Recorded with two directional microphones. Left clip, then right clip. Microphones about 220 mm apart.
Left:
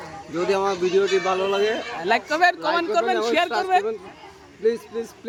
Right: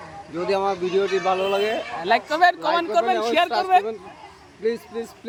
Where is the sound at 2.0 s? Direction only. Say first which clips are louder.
Right 1 dB; 5° left (ahead or behind).